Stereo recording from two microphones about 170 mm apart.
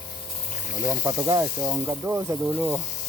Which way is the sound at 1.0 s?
20° right (ahead or behind).